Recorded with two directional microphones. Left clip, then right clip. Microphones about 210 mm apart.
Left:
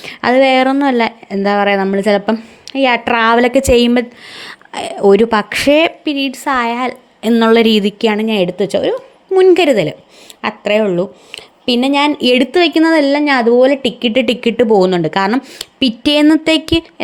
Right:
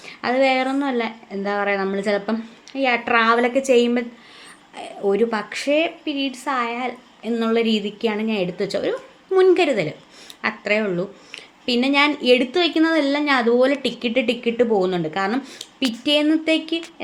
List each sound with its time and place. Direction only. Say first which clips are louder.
0.0 s speech: left 8 dB; 45° left (ahead or behind)